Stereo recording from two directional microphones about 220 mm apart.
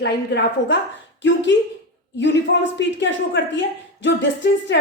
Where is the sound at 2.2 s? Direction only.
55° left (ahead or behind).